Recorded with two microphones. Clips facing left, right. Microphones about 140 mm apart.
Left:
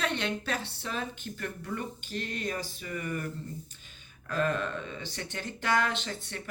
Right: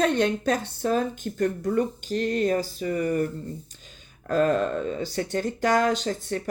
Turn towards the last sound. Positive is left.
turn(degrees=-40)  # may be behind; listen again after turning